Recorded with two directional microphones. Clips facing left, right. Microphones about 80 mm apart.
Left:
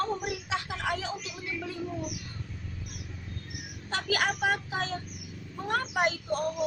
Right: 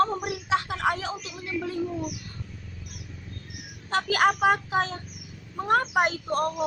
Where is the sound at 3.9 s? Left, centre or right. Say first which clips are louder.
Right 7 dB; right.